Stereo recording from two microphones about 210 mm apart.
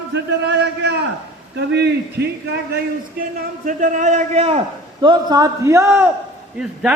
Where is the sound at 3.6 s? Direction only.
35° right (ahead or behind); by 6.1 s 10° right (ahead or behind).